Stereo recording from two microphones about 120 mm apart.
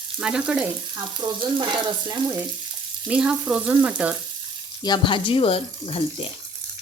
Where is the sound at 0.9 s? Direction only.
40° right (ahead or behind).